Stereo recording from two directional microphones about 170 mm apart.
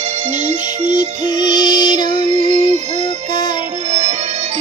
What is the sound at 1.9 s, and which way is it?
Music, 45° right (ahead or behind).